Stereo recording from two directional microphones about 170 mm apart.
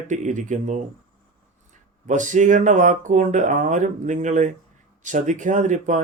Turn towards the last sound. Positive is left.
turn(degrees=-45)  # may be behind; listen again after turning